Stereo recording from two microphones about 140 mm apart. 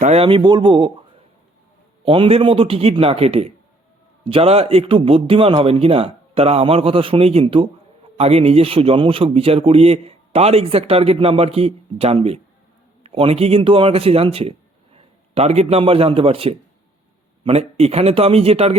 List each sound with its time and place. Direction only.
0.0 s speech: 45° right (ahead or behind)
2.0 s a man's voice: 40° right (ahead or behind)